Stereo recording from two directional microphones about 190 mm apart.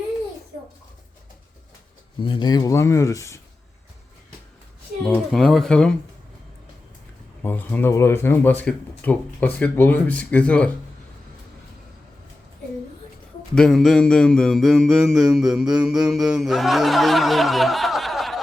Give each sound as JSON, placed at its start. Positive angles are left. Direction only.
{"t": 2.2, "sound": "speech", "side_deg": 25}
{"t": 5.0, "sound": "mantra", "side_deg": 5}
{"t": 7.4, "sound": "speech", "side_deg": 10}
{"t": 13.6, "sound": "mantra", "side_deg": 0}